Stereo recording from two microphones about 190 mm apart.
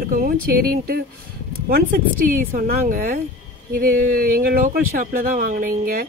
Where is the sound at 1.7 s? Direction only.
55° right (ahead or behind).